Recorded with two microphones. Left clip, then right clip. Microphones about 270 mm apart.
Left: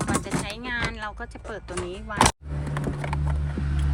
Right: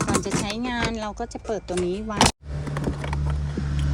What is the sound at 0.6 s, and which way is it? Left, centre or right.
Speech, centre.